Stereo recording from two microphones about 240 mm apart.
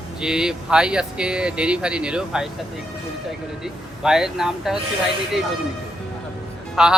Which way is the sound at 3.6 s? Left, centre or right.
Centre.